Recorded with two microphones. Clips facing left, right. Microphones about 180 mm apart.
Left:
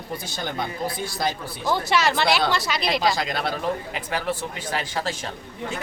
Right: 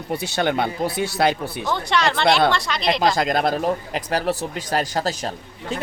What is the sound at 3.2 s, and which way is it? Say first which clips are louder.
Speech: right 6 dB; 45° right (ahead or behind).